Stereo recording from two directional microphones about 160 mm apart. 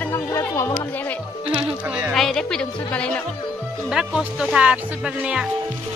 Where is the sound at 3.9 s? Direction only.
5° right (ahead or behind).